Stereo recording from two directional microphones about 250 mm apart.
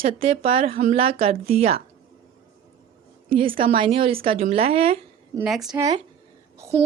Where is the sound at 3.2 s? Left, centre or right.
Right.